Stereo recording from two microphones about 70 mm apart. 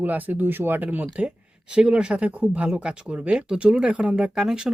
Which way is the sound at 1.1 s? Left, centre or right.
Centre.